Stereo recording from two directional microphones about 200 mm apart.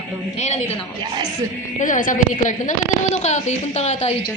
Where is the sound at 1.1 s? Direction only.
20° right (ahead or behind).